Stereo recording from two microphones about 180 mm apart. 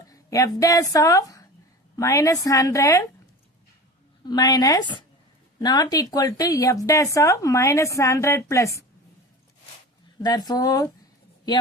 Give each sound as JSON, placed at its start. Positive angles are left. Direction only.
{"t": 0.1, "sound": "a woman's voice", "side_deg": 20}
{"t": 4.3, "sound": "a woman's voice", "side_deg": 20}
{"t": 10.2, "sound": "speech", "side_deg": 20}